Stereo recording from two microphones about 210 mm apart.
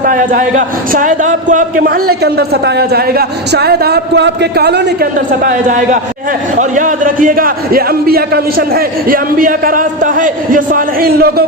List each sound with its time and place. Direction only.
0.0 s a man's voice: 40° right (ahead or behind)